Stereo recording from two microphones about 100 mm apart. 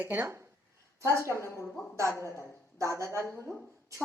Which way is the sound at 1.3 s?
25° left (ahead or behind).